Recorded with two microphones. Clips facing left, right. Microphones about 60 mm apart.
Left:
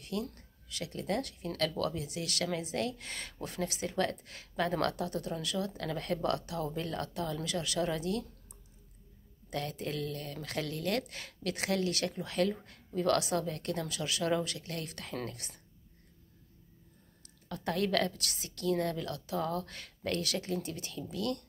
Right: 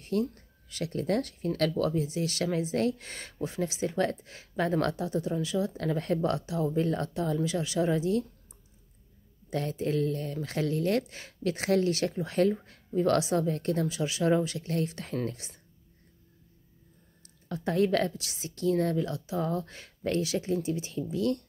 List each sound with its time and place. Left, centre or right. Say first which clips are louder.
0.0 s a sound: right 8 dB; right
0.7 s speech: right 6 dB; right
9.5 s speech: right 7 dB; right
17.5 s speech: right 6 dB; right
20.9 s speech: right 5 dB; right